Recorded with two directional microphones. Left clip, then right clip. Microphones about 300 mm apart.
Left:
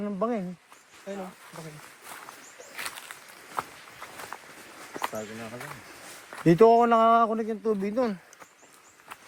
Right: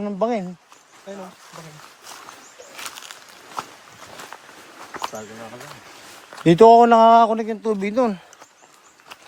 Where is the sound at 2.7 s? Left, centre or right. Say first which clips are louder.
Right 2 dB; centre.